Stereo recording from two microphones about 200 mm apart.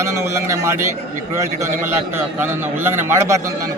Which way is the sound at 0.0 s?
15° right (ahead or behind).